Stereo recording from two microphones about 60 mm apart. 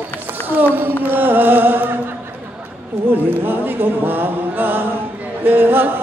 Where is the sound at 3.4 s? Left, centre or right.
Right.